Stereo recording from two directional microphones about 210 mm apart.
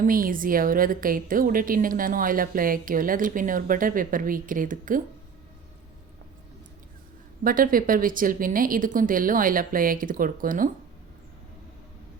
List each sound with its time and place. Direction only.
0.0 s a woman's voice: 40° right (ahead or behind)
7.4 s a woman's voice: 40° right (ahead or behind)